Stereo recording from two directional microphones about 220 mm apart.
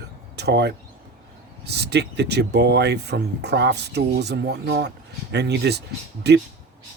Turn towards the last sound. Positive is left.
turn(degrees=-50)  # may be behind; listen again after turning